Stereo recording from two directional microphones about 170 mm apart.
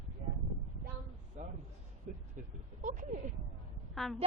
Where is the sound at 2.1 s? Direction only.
45° right (ahead or behind).